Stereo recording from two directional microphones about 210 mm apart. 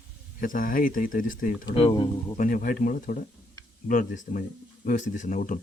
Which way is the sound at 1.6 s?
25° left (ahead or behind).